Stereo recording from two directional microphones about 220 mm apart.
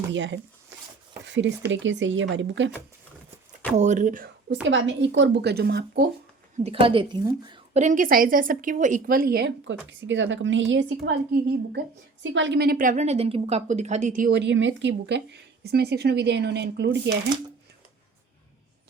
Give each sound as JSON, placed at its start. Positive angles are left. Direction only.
{"t": 0.1, "sound": "speech", "side_deg": -55}
{"t": 1.2, "sound": "a sound", "side_deg": -55}
{"t": 1.7, "sound": "speech", "side_deg": -55}
{"t": 3.8, "sound": "speech", "side_deg": -35}
{"t": 4.6, "sound": "a woman's voice", "side_deg": -55}
{"t": 6.6, "sound": "a woman's voice", "side_deg": -25}
{"t": 7.8, "sound": "a woman's voice", "side_deg": -35}